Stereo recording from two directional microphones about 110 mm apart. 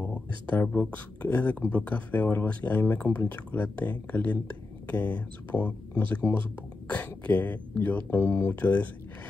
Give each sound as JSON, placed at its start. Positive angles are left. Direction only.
{"t": 0.1, "sound": "speech", "side_deg": 15}